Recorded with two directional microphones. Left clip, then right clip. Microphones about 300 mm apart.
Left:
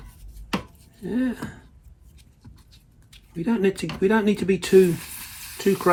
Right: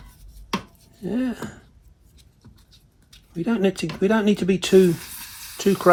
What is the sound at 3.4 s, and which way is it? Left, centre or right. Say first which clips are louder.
Speech: even; centre.